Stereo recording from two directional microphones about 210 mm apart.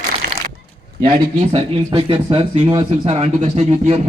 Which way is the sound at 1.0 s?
25° right (ahead or behind).